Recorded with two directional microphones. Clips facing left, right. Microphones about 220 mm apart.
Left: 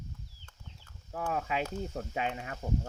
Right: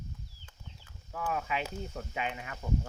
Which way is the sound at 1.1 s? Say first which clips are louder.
Left 1 dB; 30° left (ahead or behind).